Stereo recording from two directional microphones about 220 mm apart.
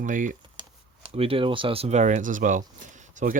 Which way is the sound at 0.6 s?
20° right (ahead or behind).